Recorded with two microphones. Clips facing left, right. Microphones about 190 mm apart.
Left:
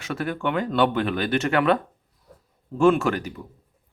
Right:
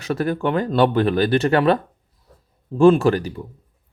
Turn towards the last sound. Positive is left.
turn(degrees=-35)  # may be behind; listen again after turning